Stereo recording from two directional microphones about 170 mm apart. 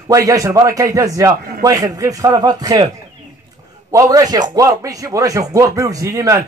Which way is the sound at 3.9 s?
20° right (ahead or behind).